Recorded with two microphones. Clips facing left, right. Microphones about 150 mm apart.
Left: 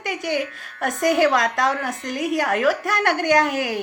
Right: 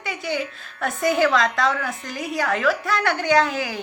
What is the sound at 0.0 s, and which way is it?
A woman's voice, 50° left (ahead or behind).